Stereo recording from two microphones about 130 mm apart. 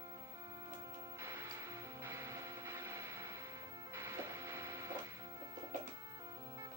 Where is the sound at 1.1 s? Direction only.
20° right (ahead or behind).